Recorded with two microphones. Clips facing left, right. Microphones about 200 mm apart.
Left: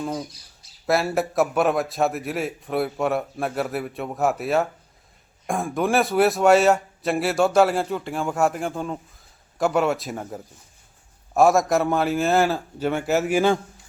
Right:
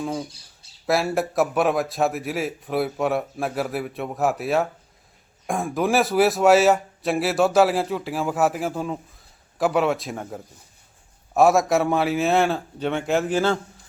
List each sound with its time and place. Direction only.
0.0 s speech: centre (ahead or behind)
0.3 s a sound: 30° right (ahead or behind)
0.9 s a man's voice: centre (ahead or behind)